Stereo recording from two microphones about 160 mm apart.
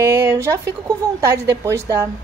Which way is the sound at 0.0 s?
15° right (ahead or behind).